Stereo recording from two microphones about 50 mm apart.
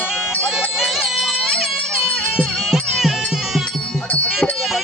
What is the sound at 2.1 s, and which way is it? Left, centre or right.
Music, centre.